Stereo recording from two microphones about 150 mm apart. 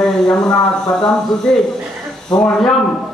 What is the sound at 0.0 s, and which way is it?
Speech, 5° left (ahead or behind).